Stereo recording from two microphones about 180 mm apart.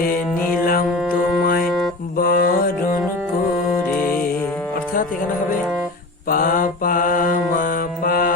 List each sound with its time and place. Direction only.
0.0 s music: 50° left (ahead or behind)
2.1 s mantra: 50° left (ahead or behind)
6.2 s mantra: 50° left (ahead or behind)